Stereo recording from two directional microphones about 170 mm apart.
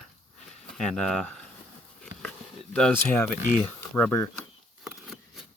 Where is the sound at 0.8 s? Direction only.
5° left (ahead or behind).